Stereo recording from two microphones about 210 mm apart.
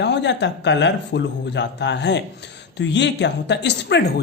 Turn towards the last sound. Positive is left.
turn(degrees=55)  # may be behind; listen again after turning